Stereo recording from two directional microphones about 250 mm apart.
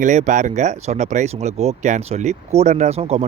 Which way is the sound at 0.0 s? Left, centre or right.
Right.